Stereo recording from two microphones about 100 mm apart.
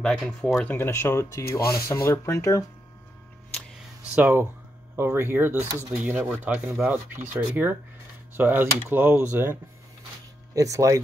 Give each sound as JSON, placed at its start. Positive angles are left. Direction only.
{"t": 0.0, "sound": "speech", "side_deg": 5}
{"t": 0.7, "sound": "speech", "side_deg": 25}
{"t": 4.1, "sound": "speech", "side_deg": -20}
{"t": 10.5, "sound": "speech", "side_deg": -35}